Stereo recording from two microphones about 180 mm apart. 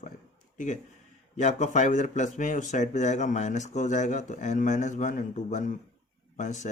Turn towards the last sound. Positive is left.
turn(degrees=40)  # may be behind; listen again after turning